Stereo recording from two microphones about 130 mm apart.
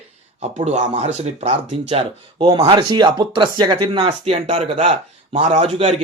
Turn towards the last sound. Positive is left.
turn(degrees=-50)  # may be behind; listen again after turning